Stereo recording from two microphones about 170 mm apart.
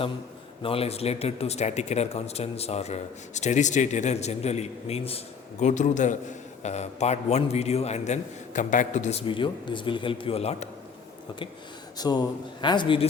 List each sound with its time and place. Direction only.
0.6 s speech: 35° left (ahead or behind)
11.9 s speech: 25° left (ahead or behind)